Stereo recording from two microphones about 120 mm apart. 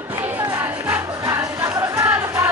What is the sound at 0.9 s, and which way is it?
Music, 25° right (ahead or behind).